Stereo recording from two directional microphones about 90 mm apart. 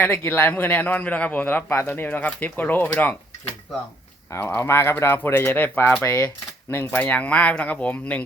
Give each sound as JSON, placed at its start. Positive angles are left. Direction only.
{"t": 0.0, "sound": "a man's voice", "side_deg": 25}
{"t": 4.3, "sound": "a man's voice", "side_deg": 25}